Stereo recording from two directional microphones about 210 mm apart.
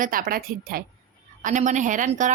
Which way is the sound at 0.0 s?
40° right (ahead or behind).